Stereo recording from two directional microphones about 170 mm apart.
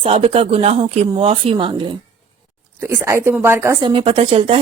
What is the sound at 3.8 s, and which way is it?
Speech, 30° right (ahead or behind).